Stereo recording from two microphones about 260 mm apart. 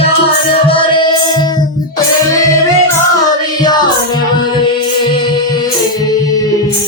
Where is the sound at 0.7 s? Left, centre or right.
Centre.